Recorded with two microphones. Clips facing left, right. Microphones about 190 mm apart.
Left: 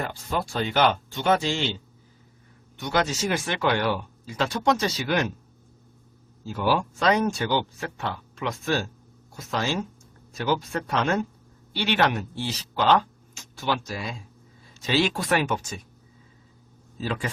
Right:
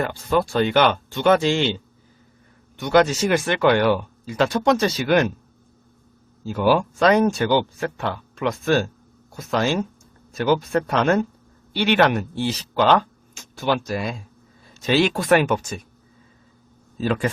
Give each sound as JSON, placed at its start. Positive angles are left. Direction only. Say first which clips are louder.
{"t": 0.0, "sound": "speech", "louder": "right 8 dB", "side_deg": -65}
{"t": 2.8, "sound": "speech", "louder": "right 8 dB", "side_deg": -60}
{"t": 6.5, "sound": "speech", "louder": "right 6 dB", "side_deg": -60}
{"t": 17.0, "sound": "speech", "louder": "right 7 dB", "side_deg": -55}